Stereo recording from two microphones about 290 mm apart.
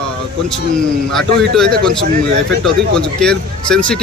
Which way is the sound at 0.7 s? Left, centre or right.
Centre.